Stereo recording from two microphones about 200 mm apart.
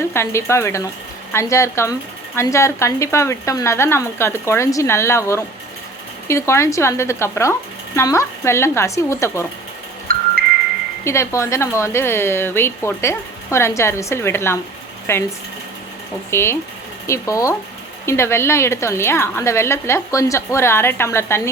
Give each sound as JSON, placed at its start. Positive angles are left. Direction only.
{"t": 0.1, "sound": "speech", "side_deg": 15}
{"t": 10.1, "sound": "music", "side_deg": -45}
{"t": 11.0, "sound": "speech", "side_deg": 15}
{"t": 16.3, "sound": "speech", "side_deg": 10}